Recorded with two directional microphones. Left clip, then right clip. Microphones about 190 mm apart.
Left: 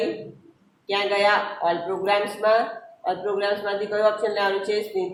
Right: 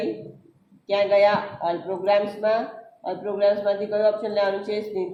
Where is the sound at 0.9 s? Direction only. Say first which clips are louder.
Right 2 dB; 30° right (ahead or behind).